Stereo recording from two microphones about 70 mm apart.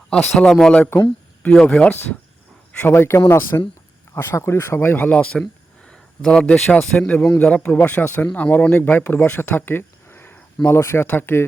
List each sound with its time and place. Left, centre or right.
0.3 s speech: centre
2.8 s speech: left
5.1 s speech: centre; by 11.4 s left